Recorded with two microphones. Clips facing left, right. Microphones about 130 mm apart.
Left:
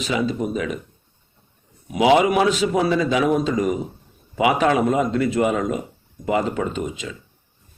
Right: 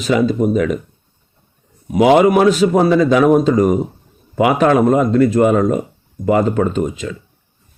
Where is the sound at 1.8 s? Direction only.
45° right (ahead or behind).